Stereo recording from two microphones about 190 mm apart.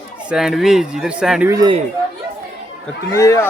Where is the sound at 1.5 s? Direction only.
20° right (ahead or behind).